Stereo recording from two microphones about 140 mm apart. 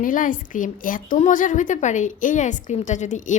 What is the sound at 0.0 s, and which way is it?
A woman's voice, 70° left (ahead or behind).